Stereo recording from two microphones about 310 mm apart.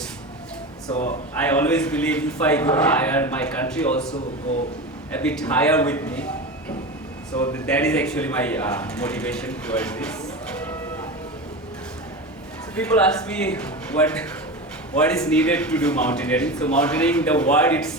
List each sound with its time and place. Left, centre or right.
0.9 s speech: left
1.5 s a man's voice: centre
5.1 s a man's voice: centre
7.3 s a man's voice: centre
12.7 s a man's voice: centre